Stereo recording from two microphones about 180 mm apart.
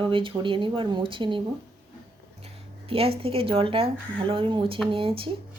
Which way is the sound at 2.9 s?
30° right (ahead or behind).